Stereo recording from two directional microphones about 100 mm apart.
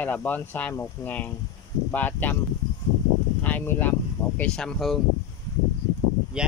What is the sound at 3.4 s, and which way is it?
Speech, 15° left (ahead or behind).